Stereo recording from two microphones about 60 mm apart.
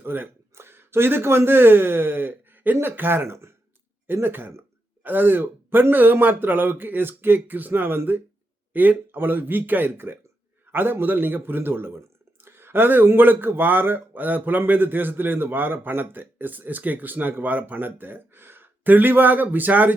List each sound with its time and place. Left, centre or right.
0.0 s a man's voice: right
3.2 s speech: right
4.0 s a man's voice: right